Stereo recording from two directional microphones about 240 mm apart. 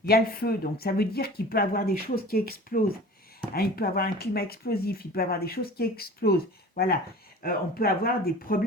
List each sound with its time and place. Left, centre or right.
0.1 s speech: left